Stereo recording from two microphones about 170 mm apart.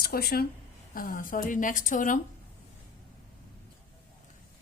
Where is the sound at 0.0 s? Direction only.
60° left (ahead or behind).